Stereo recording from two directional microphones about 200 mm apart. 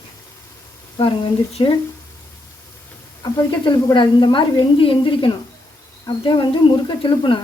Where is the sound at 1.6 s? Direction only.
25° left (ahead or behind).